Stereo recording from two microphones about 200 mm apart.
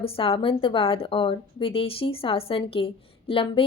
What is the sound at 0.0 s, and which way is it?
A woman's voice, 25° left (ahead or behind).